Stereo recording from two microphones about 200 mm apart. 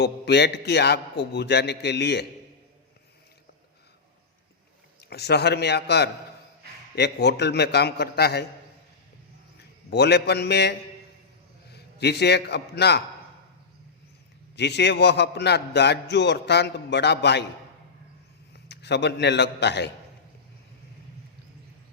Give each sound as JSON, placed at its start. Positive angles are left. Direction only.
{"t": 0.0, "sound": "a man's voice", "side_deg": 55}
{"t": 4.9, "sound": "a man's voice", "side_deg": 55}
{"t": 9.9, "sound": "a man's voice", "side_deg": 55}
{"t": 14.5, "sound": "a man's voice", "side_deg": 60}
{"t": 18.5, "sound": "a man's voice", "side_deg": 60}